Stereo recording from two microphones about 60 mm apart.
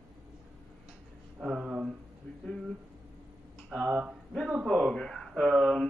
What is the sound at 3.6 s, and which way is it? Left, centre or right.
Speech, centre.